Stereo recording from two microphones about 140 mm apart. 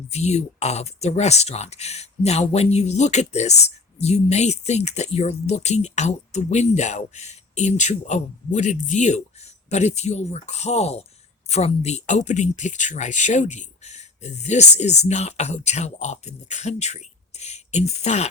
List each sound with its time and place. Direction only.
0.1 s speech: 50° left (ahead or behind)